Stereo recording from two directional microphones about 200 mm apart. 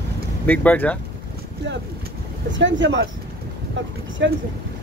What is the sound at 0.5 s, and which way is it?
Speech, 10° left (ahead or behind).